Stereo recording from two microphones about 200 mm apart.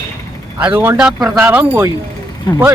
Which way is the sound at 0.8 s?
5° right (ahead or behind).